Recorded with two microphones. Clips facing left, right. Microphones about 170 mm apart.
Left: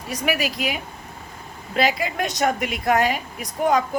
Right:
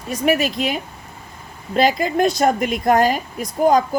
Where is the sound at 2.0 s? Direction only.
35° right (ahead or behind).